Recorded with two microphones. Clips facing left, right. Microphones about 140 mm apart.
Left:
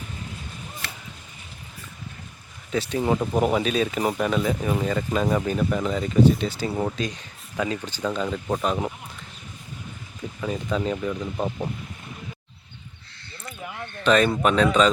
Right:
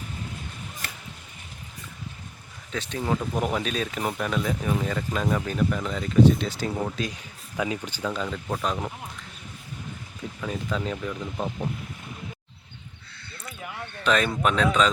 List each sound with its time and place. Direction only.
0.8 s a sound: 45° right (ahead or behind)
3.0 s speech: 15° left (ahead or behind)
3.4 s speech: 5° left (ahead or behind)
8.3 s speech: 10° left (ahead or behind)
10.4 s speech: 5° left (ahead or behind)
13.4 s a sound: centre (ahead or behind)